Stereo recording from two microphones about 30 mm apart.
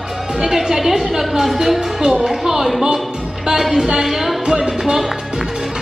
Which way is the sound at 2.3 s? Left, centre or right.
Centre.